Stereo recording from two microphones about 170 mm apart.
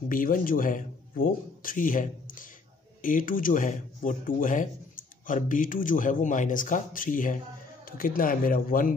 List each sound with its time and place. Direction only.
0.1 s a man's voice: 55° left (ahead or behind)